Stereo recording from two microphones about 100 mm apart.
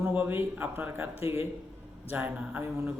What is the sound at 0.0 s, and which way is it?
A man's voice, 20° right (ahead or behind).